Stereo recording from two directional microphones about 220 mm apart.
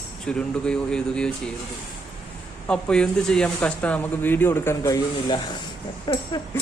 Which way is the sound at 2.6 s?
5° left (ahead or behind).